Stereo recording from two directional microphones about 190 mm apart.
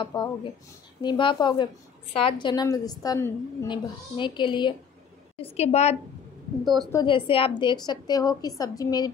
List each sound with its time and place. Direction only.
0.0 s a woman's voice: 25° left (ahead or behind)
6.9 s a woman's voice: 25° left (ahead or behind)